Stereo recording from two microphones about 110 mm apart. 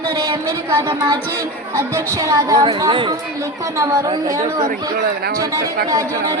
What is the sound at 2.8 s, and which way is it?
Speech, 45° right (ahead or behind).